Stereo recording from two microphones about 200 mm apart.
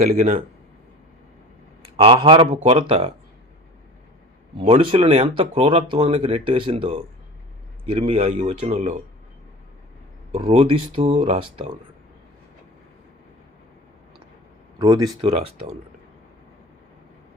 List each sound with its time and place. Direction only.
0.0 s a man's voice: 35° right (ahead or behind)
2.0 s speech: 25° right (ahead or behind)
4.5 s a man's voice: 25° right (ahead or behind)
10.3 s speech: 30° right (ahead or behind)
14.8 s speech: 20° right (ahead or behind)